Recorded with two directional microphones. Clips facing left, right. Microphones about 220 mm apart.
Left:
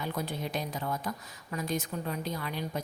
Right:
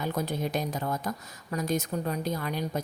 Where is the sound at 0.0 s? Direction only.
45° right (ahead or behind).